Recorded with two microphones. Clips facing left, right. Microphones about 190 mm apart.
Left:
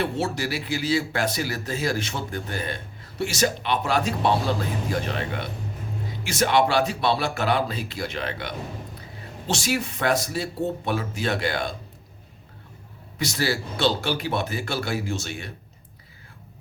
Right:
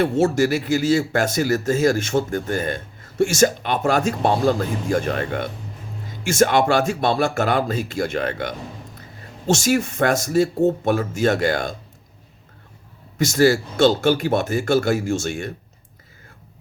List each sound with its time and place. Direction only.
0.0 s speech: 45° right (ahead or behind)
13.1 s speech: 45° right (ahead or behind)